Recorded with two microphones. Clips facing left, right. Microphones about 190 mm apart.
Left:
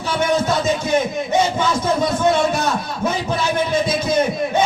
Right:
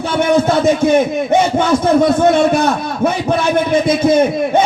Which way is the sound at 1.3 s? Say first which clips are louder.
Right 4 dB; 60° right (ahead or behind).